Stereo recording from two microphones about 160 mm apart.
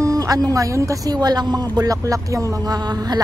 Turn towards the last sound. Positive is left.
turn(degrees=-25)  # may be behind; listen again after turning